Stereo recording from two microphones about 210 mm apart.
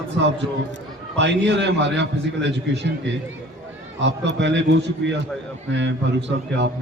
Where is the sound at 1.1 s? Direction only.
60° right (ahead or behind).